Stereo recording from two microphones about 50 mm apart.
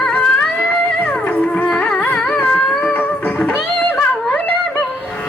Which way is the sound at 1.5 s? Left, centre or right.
Left.